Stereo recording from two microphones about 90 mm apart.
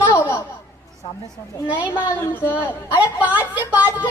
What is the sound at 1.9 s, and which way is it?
Speech, 30° left (ahead or behind).